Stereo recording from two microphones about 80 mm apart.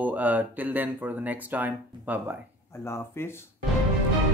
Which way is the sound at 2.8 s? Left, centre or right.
Left.